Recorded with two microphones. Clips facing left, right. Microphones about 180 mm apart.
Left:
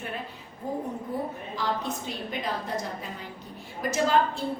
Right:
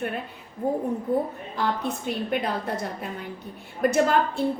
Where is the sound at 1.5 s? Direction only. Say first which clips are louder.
Right 4 dB; 60° right (ahead or behind).